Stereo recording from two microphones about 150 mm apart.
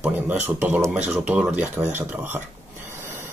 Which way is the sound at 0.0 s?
10° right (ahead or behind).